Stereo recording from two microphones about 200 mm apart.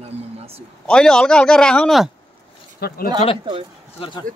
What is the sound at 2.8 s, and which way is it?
Speech, 50° left (ahead or behind).